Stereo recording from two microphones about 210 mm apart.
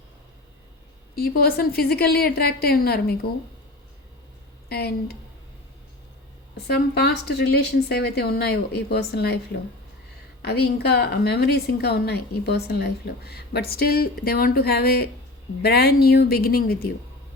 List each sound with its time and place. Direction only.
1.1 s a woman's voice: 45° left (ahead or behind)
4.7 s a woman's voice: 50° left (ahead or behind)
6.7 s a woman's voice: 50° left (ahead or behind)